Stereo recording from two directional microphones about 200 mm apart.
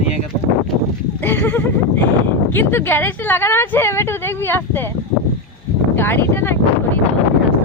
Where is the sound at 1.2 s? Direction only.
10° left (ahead or behind).